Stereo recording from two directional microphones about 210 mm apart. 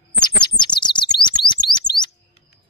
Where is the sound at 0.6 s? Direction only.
20° left (ahead or behind).